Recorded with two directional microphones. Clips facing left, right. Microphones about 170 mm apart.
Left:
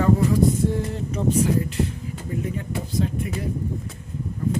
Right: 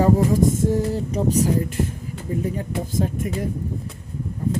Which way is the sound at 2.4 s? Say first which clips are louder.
Right 3 dB; 40° right (ahead or behind).